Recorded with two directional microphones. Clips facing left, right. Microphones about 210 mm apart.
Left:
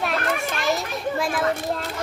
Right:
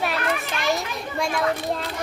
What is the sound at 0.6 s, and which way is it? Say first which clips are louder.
A child's voice: left 1 dB; centre (ahead or behind).